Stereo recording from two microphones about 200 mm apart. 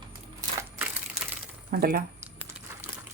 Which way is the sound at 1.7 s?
50° right (ahead or behind).